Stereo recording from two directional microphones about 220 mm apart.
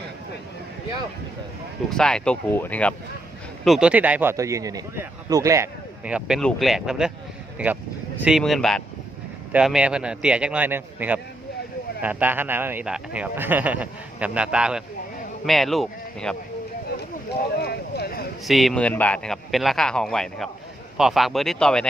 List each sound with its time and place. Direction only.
1.9 s speech: 5° left (ahead or behind); by 5.6 s 15° right (ahead or behind)
6.1 s speech: 5° right (ahead or behind)
17.6 s speech: 45° left (ahead or behind)
18.4 s speech: centre (ahead or behind)